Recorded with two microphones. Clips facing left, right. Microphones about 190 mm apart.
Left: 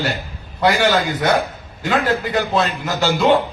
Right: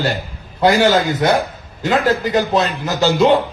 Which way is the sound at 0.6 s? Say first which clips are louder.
Right 3 dB; 30° right (ahead or behind).